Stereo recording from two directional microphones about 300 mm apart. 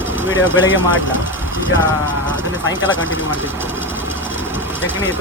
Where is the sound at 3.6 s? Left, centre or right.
Centre.